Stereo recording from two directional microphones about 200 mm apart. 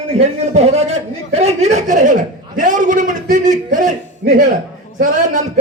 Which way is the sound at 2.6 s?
40° right (ahead or behind).